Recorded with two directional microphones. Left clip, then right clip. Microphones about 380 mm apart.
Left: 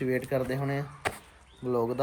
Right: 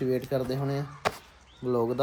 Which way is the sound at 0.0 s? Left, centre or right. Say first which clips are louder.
Right 1 dB; centre.